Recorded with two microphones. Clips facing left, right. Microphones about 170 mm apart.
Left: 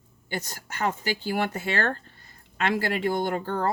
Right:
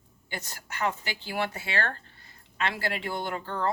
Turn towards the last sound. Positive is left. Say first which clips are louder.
# left 5 dB
turn(degrees=45)  # may be behind; listen again after turning